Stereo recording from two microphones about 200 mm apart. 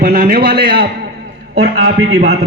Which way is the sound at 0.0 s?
50° right (ahead or behind).